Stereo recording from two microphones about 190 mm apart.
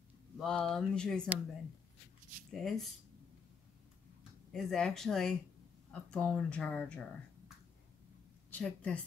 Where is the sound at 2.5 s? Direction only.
Centre (ahead or behind).